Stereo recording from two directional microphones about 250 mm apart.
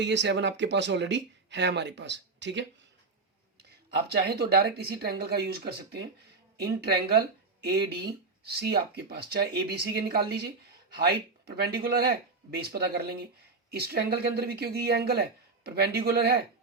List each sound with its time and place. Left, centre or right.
0.0 s speech: right
3.9 s speech: right